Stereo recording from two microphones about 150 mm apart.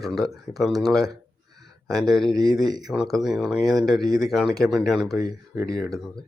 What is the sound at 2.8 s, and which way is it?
Speech, centre (ahead or behind).